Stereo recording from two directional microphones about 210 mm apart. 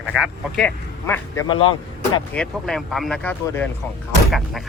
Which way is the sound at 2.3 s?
5° left (ahead or behind).